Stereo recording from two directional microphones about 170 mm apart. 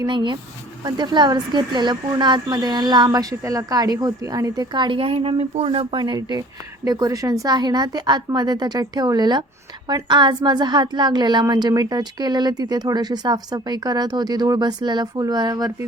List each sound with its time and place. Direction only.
0.0 s a woman's voice: 25° right (ahead or behind)